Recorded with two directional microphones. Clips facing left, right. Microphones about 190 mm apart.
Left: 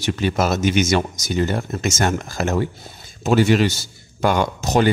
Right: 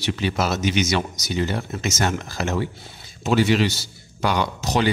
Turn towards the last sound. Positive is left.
turn(degrees=45)  # may be behind; listen again after turning